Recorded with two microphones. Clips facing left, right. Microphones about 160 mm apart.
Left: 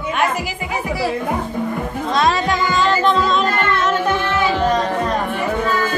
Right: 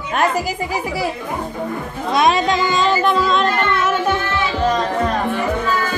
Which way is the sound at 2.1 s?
20° right (ahead or behind).